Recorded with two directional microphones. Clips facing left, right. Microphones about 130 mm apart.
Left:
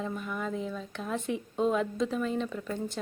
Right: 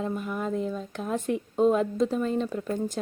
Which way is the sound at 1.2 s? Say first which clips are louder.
Right 6 dB; 45° right (ahead or behind).